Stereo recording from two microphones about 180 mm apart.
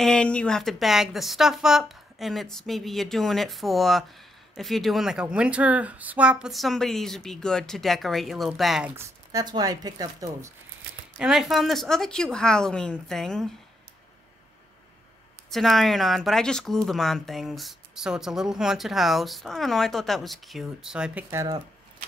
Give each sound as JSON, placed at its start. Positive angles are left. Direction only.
{"t": 0.0, "sound": "speech", "side_deg": 5}
{"t": 8.9, "sound": "speech", "side_deg": -20}
{"t": 11.1, "sound": "speech", "side_deg": 0}
{"t": 15.5, "sound": "speech", "side_deg": 0}